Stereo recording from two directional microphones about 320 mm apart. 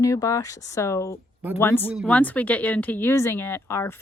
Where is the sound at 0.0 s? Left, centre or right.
Centre.